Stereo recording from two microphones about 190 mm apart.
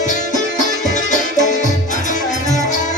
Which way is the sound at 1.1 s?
40° left (ahead or behind).